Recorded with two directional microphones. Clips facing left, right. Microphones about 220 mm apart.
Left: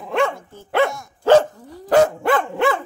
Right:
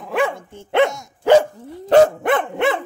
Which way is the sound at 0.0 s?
Centre (ahead or behind).